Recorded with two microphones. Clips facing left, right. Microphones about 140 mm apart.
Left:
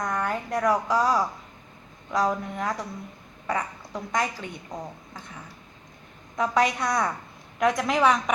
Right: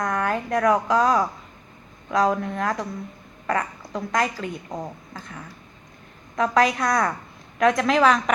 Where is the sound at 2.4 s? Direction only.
80° right.